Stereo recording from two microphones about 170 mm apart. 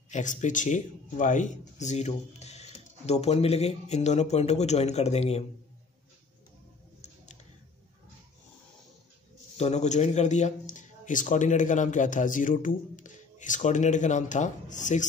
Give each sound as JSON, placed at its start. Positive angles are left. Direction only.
{"t": 0.1, "sound": "speech", "side_deg": 45}
{"t": 9.6, "sound": "speech", "side_deg": 40}